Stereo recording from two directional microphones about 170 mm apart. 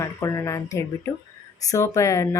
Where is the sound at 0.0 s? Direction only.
20° left (ahead or behind).